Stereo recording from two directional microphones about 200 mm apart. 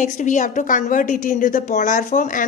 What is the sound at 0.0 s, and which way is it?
A woman's voice, 40° left (ahead or behind).